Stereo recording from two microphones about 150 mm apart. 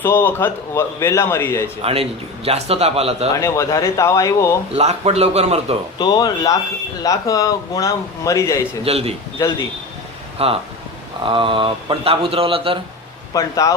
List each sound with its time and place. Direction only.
0.0 s speech: 15° left (ahead or behind)
1.8 s speech: 40° right (ahead or behind)
3.4 s a man's voice: 20° left (ahead or behind)
4.7 s a man's voice: 45° right (ahead or behind)
6.0 s a man's voice: 25° left (ahead or behind)
8.8 s speech: 40° right (ahead or behind)
9.4 s speech: 15° left (ahead or behind)
10.3 s speech: 40° right (ahead or behind)
13.3 s a man's voice: 20° left (ahead or behind)